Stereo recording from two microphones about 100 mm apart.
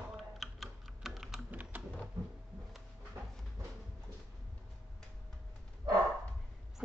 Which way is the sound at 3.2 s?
25° right (ahead or behind).